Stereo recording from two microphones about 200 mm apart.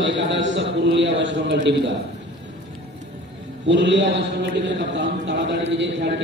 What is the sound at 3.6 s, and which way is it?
A man's voice, 65° right (ahead or behind).